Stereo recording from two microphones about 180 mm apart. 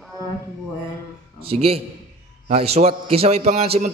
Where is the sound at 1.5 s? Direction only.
35° right (ahead or behind).